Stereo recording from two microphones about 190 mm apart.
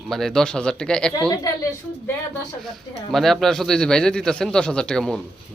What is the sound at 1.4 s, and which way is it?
Speech, 15° left (ahead or behind).